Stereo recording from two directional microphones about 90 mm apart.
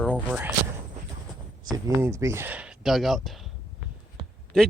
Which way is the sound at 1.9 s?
30° right (ahead or behind).